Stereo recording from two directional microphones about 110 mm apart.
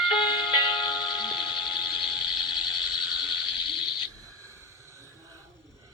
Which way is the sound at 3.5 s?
45° left (ahead or behind).